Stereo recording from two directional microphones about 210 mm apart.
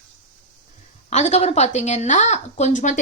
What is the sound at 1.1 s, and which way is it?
A woman's voice, 35° left (ahead or behind).